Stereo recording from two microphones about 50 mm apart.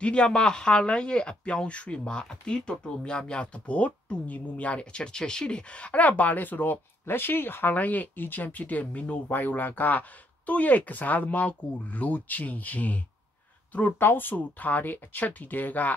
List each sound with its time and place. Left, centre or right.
0.0 s speech: left
13.9 s speech: left